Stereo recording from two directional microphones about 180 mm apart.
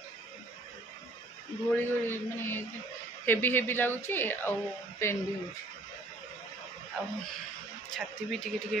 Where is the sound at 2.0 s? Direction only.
10° left (ahead or behind).